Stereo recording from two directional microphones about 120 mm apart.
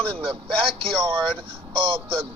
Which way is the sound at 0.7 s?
50° right (ahead or behind).